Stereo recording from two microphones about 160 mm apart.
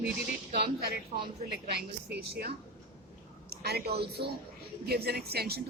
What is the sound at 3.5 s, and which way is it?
A woman's voice, 80° right.